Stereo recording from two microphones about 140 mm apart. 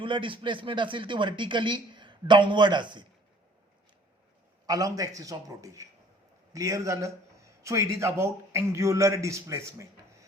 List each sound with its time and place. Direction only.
0.0 s speech: 35° right (ahead or behind)
4.6 s a man's voice: 25° right (ahead or behind)